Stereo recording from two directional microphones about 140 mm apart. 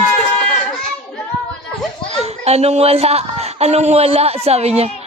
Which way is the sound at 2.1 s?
50° right (ahead or behind).